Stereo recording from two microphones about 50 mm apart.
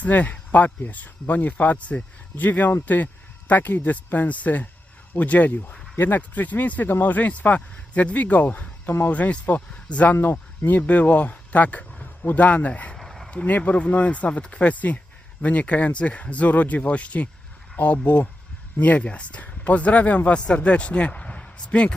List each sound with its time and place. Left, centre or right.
0.0 s speech: left
10.1 s speech: left
10.7 s speech: left
13.0 s a sound: centre
13.3 s speech: left